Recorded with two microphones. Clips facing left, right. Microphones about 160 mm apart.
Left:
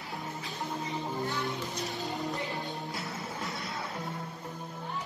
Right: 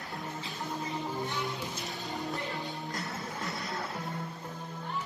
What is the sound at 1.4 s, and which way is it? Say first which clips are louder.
Music: left 2 dB; centre (ahead or behind).